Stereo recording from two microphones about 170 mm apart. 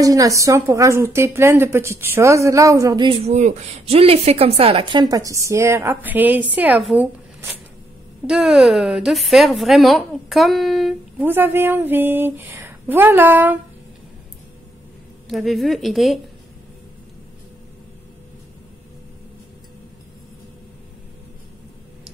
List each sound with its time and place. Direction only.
0.0 s a woman's voice: 20° right (ahead or behind)
8.3 s a woman's voice: 5° right (ahead or behind)
11.1 s a woman's voice: 10° right (ahead or behind)
15.2 s a woman's voice: centre (ahead or behind)